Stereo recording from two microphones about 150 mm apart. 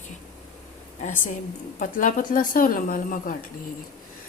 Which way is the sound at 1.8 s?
60° left (ahead or behind).